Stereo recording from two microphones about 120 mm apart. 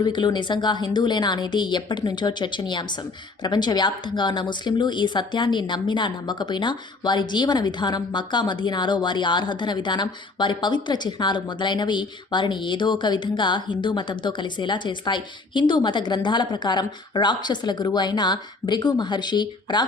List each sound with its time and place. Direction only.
0.0 s speech: 35° left (ahead or behind)